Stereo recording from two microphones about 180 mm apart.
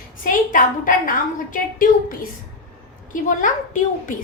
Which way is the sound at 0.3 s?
50° left (ahead or behind).